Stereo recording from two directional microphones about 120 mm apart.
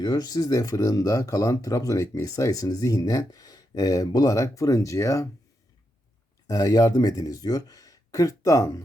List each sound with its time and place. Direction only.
0.0 s speech: 35° left (ahead or behind)
6.5 s speech: 30° left (ahead or behind)